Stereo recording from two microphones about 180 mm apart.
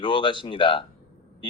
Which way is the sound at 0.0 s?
25° left (ahead or behind).